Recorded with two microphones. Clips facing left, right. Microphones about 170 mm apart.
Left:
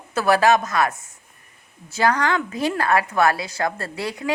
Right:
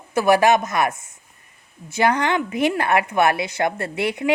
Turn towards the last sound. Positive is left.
turn(degrees=-25)  # may be behind; listen again after turning